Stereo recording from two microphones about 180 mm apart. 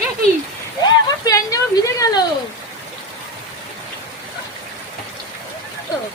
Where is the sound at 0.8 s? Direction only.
20° left (ahead or behind).